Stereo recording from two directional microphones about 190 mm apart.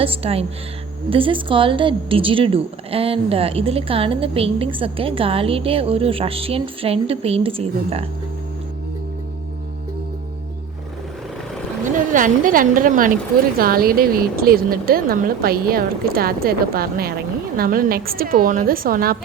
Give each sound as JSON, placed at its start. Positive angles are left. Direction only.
{"t": 0.0, "sound": "speech", "side_deg": -30}
{"t": 11.9, "sound": "a woman's voice", "side_deg": -45}